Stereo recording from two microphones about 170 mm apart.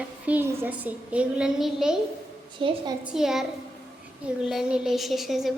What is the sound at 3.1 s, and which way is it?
Speech, centre (ahead or behind).